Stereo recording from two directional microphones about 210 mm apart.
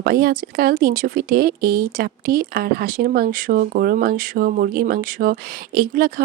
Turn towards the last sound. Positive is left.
turn(degrees=-45)  # may be behind; listen again after turning